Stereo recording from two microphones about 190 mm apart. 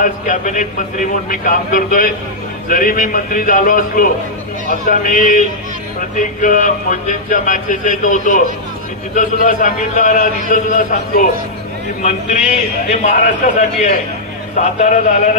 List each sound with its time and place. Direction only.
0.0 s a man's voice: 45° left (ahead or behind)